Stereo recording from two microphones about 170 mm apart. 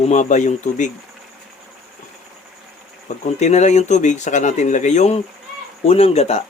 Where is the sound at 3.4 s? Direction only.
45° left (ahead or behind).